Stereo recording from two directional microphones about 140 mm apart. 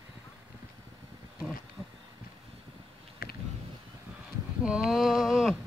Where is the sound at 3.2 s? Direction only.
90° left.